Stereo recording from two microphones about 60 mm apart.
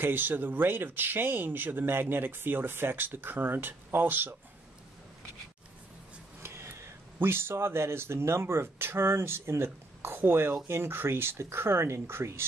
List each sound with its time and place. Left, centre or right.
0.0 s speech: right
6.4 s a sound: right
7.2 s speech: right